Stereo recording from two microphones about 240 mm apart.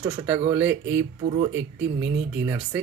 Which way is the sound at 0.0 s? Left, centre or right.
Centre.